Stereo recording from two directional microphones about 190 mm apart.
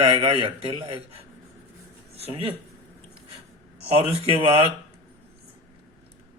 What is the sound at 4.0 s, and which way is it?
Speech, 30° right (ahead or behind).